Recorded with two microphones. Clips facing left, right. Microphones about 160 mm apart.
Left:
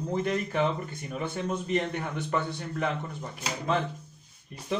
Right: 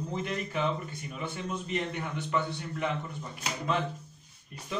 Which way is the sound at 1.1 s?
45° left (ahead or behind).